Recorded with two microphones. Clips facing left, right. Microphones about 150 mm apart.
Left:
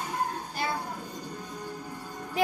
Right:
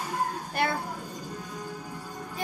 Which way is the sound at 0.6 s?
65° right (ahead or behind).